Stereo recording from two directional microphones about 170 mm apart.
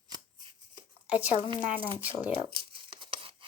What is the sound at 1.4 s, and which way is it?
Speech, 30° right (ahead or behind).